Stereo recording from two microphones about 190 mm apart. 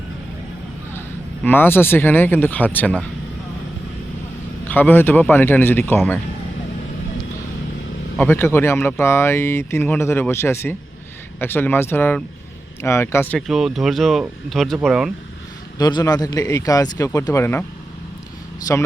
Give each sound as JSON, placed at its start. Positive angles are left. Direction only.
{"t": 1.5, "sound": "speech", "side_deg": 10}
{"t": 4.6, "sound": "speech", "side_deg": 10}
{"t": 8.2, "sound": "speech", "side_deg": 10}
{"t": 13.5, "sound": "speech", "side_deg": 0}
{"t": 15.8, "sound": "speech", "side_deg": 20}